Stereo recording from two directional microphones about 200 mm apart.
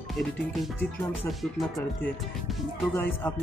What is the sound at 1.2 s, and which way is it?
Speech, centre (ahead or behind).